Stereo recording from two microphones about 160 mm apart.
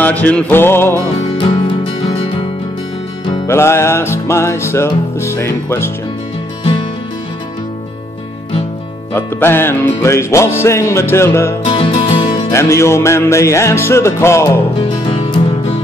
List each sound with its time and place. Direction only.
0.0 s music: 10° left (ahead or behind)
1.1 s music: 30° left (ahead or behind)
3.4 s music: 15° left (ahead or behind)
9.1 s music: 15° left (ahead or behind)
11.6 s music: 35° left (ahead or behind)
12.5 s music: 15° left (ahead or behind)
15.0 s music: 30° left (ahead or behind)